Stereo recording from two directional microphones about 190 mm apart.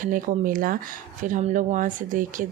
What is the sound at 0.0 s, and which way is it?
Speech, 45° right (ahead or behind).